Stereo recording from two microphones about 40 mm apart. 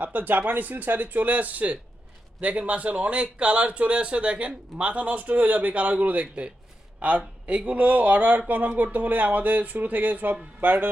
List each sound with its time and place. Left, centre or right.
0.0 s speech: right